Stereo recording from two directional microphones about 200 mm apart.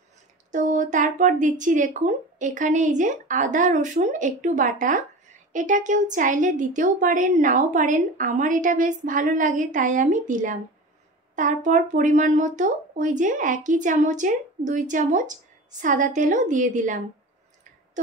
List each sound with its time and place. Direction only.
0.5 s a woman's voice: 40° right (ahead or behind)